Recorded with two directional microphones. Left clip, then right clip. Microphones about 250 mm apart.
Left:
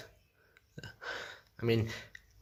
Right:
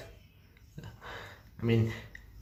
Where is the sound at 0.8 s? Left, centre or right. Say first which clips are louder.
Left 3 dB; left.